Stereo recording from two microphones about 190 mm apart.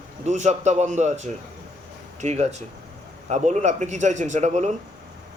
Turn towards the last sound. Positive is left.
turn(degrees=-35)  # may be behind; listen again after turning